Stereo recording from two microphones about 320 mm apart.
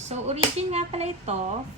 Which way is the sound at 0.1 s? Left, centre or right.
Centre.